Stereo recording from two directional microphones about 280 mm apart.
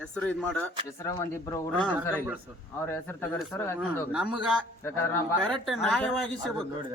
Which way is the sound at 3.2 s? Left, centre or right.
Centre.